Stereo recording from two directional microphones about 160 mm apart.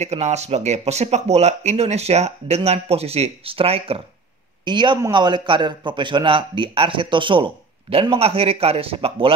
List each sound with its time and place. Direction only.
0.0 s a man's voice: 45° right (ahead or behind)